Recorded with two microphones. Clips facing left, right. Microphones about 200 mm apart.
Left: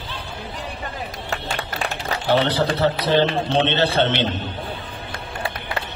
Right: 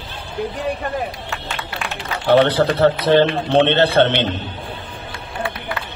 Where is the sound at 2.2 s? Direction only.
55° right (ahead or behind).